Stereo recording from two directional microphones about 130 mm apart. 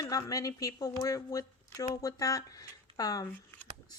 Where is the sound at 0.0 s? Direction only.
25° left (ahead or behind).